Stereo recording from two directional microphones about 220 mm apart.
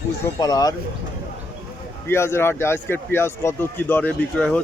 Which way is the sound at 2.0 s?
10° left (ahead or behind).